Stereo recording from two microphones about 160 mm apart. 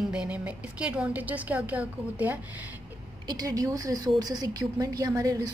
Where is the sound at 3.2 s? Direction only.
25° right (ahead or behind).